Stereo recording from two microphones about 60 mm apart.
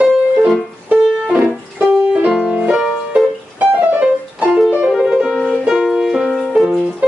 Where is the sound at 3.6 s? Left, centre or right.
Right.